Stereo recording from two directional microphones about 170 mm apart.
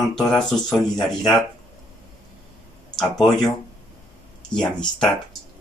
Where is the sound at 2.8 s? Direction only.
5° left (ahead or behind).